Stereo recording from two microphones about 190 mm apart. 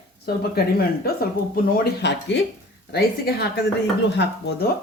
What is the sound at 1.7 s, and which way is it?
Speech, 65° left (ahead or behind).